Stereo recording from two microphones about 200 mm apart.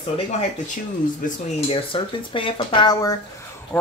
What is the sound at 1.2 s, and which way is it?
Speech, 30° left (ahead or behind).